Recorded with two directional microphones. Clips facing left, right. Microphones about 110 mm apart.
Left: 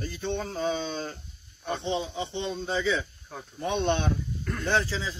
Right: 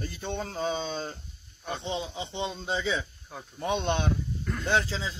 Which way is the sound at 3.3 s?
10° right (ahead or behind).